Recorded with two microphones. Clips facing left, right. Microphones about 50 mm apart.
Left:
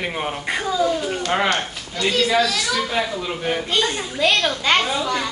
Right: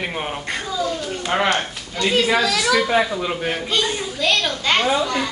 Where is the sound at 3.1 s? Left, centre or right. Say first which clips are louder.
Right 3 dB; centre.